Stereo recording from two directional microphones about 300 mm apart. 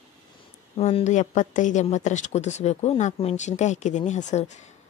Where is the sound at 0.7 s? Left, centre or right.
Left.